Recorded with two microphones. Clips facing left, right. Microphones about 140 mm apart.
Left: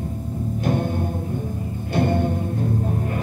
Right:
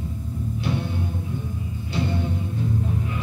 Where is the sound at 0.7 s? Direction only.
50° left (ahead or behind).